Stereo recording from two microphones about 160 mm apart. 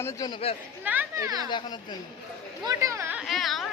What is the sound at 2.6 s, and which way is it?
Speech, 20° right (ahead or behind).